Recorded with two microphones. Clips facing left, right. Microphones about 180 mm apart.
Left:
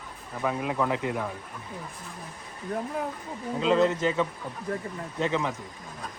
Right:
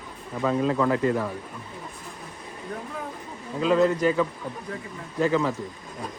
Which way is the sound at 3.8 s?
25° left (ahead or behind).